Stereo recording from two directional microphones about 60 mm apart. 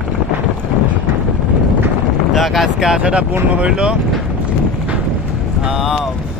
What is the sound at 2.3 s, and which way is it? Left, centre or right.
Speech, centre.